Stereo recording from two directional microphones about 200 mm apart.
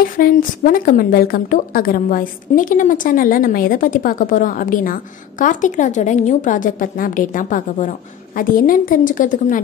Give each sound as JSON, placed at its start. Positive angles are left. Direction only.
{"t": 0.2, "sound": "a woman's voice", "side_deg": 45}